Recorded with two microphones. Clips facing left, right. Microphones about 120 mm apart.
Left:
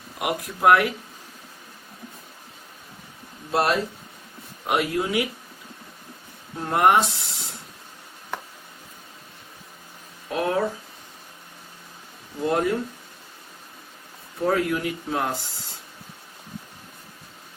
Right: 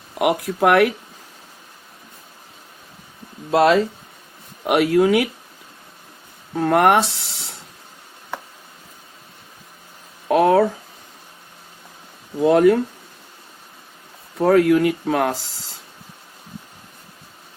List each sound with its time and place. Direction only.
0.2 s speech: 65° right (ahead or behind)
4.6 s speech: 70° right (ahead or behind)
6.6 s speech: 70° right (ahead or behind)
10.2 s speech: 85° right
12.4 s speech: 90° right
14.3 s speech: 75° right (ahead or behind)